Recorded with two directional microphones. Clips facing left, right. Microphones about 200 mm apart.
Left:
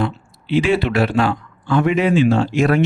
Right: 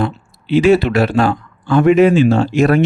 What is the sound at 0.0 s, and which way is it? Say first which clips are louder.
Speech: right 2 dB; 40° right (ahead or behind).